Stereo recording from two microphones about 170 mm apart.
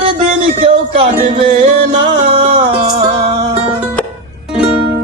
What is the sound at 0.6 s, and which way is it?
Music, 35° right (ahead or behind).